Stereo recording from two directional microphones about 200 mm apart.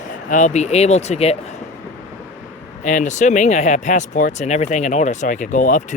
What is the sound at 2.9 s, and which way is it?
Speech, 35° left (ahead or behind).